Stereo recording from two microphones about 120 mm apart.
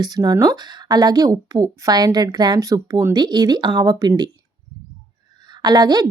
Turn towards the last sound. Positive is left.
turn(degrees=-35)  # may be behind; listen again after turning